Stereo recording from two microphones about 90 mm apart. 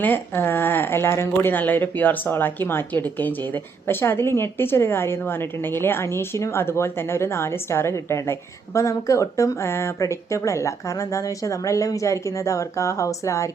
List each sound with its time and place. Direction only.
0.0 s a woman's voice: 20° left (ahead or behind)